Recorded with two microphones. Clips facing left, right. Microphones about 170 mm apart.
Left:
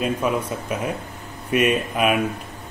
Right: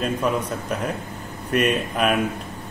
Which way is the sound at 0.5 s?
5° left (ahead or behind).